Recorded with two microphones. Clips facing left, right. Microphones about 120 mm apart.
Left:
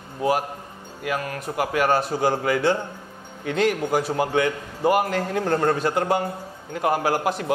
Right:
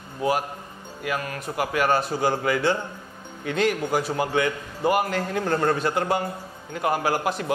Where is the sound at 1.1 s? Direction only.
45° left (ahead or behind).